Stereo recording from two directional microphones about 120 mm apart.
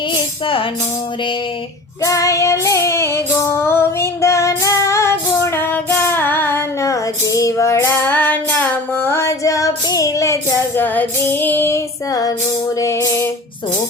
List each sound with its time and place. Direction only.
0.4 s music: 45° left (ahead or behind)
2.0 s female singing: 25° left (ahead or behind)
10.8 s female singing: 15° left (ahead or behind)
12.7 s music: 25° left (ahead or behind)